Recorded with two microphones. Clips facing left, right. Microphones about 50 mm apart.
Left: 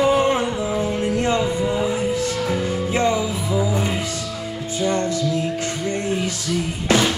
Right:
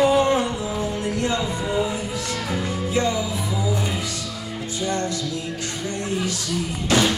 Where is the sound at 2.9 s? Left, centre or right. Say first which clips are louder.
Left 2 dB; left.